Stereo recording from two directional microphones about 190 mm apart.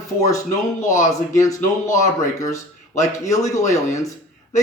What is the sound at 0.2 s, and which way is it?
Speech, 15° left (ahead or behind).